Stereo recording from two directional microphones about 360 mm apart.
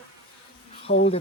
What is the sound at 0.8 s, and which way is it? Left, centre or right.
Bee, centre.